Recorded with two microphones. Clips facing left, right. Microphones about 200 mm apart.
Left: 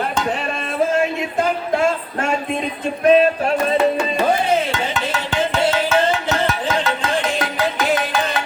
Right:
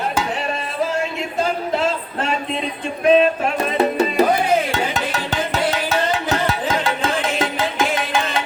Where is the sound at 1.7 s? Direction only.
50° left (ahead or behind).